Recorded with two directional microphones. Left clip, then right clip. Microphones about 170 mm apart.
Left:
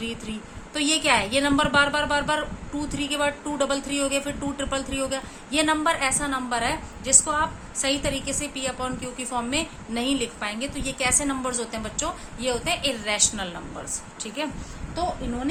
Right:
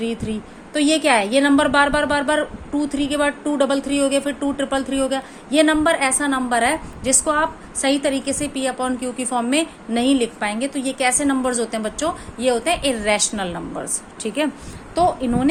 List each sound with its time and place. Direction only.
0.0 s a woman's voice: 25° right (ahead or behind)